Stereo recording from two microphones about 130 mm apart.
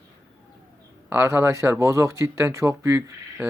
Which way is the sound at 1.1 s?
20° right (ahead or behind).